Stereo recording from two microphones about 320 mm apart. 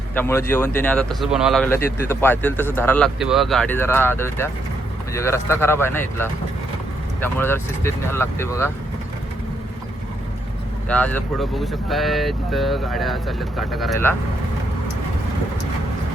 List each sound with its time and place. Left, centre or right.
0.1 s speech: centre
10.8 s speech: centre